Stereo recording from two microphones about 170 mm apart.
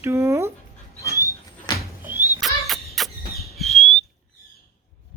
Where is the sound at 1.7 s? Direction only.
25° left (ahead or behind).